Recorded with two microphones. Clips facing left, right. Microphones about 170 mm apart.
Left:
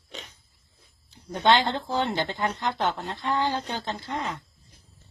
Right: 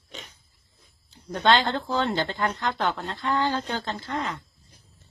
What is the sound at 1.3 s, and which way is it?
Speech, 20° left (ahead or behind).